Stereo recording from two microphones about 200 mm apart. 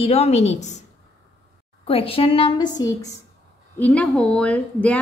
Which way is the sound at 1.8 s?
30° left (ahead or behind).